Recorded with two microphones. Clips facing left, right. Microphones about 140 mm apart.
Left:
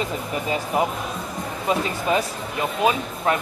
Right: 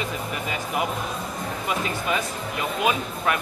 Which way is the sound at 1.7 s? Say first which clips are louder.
Left 5 dB; 30° left (ahead or behind).